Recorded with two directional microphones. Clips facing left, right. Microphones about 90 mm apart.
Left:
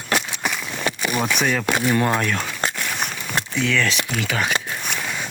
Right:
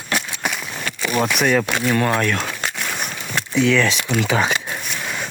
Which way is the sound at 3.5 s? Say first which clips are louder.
Right 6 dB; 10° right (ahead or behind).